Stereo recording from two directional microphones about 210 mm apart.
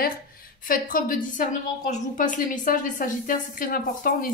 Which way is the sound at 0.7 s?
40° left (ahead or behind).